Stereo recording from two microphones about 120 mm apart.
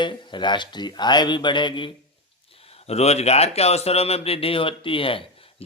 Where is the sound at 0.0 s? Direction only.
40° left (ahead or behind).